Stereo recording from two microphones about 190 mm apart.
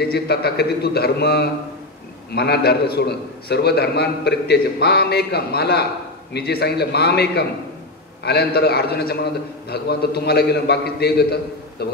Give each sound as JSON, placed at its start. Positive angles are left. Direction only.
{"t": 0.0, "sound": "a man's voice", "side_deg": 55}